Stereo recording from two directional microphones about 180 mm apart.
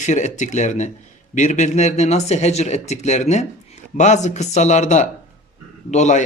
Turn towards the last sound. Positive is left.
turn(degrees=40)  # may be behind; listen again after turning